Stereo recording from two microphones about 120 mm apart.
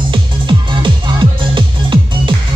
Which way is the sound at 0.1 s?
45° right (ahead or behind).